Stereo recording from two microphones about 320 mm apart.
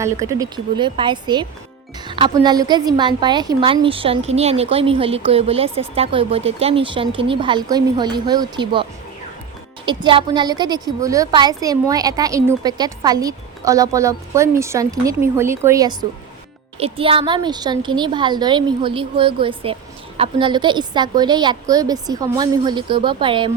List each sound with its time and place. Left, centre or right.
0.0 s a woman's voice: centre